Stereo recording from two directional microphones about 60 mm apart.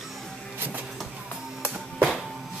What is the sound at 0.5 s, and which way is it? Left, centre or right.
Music, right.